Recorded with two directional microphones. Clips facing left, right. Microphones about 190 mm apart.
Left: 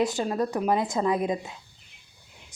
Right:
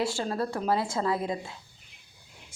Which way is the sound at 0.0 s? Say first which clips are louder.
Left 4 dB; 20° left (ahead or behind).